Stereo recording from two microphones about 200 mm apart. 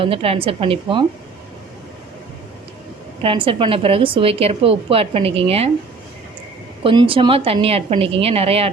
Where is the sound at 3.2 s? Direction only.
25° right (ahead or behind).